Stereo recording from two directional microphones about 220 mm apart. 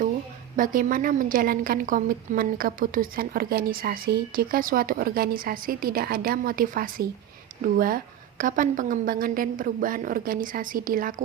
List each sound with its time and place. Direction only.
0.5 s a woman's voice: 40° right (ahead or behind)